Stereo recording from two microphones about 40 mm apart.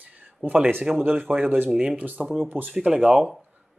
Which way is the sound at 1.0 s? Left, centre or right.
Right.